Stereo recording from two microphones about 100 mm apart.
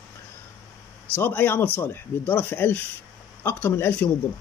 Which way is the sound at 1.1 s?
20° left (ahead or behind).